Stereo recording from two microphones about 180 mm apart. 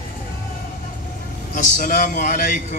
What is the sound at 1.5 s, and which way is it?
A man's voice, 45° left (ahead or behind).